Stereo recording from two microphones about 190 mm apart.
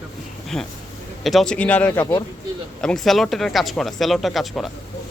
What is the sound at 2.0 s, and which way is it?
Speech, 20° left (ahead or behind).